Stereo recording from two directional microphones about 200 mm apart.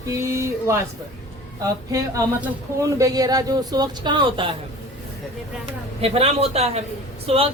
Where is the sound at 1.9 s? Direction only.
15° right (ahead or behind).